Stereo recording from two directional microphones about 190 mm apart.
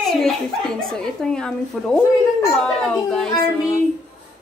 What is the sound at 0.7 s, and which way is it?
A woman's voice, 5° left (ahead or behind).